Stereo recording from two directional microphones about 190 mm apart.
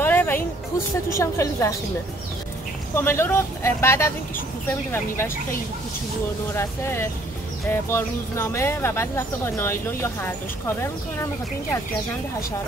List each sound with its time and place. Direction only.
0.0 s a sound: 10° left (ahead or behind)
1.1 s speech: 15° left (ahead or behind)
2.9 s speech: 10° left (ahead or behind)
6.5 s speech: 15° left (ahead or behind)